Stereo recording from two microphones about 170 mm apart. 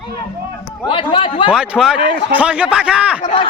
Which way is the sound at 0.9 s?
30° left (ahead or behind).